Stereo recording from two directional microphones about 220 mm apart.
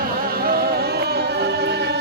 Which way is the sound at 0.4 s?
45° right (ahead or behind).